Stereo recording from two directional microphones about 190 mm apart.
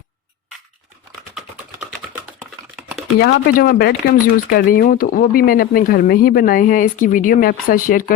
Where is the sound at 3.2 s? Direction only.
60° left (ahead or behind).